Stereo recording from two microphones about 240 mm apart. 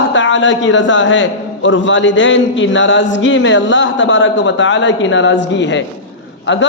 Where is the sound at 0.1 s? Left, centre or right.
Left.